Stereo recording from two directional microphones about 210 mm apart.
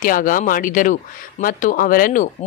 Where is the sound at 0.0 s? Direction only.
40° left (ahead or behind).